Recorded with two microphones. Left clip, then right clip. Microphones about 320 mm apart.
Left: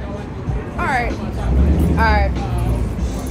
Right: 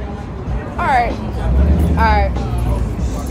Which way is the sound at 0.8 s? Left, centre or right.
Centre.